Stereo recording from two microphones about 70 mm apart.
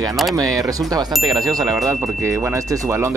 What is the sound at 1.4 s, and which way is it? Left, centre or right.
Speech, right.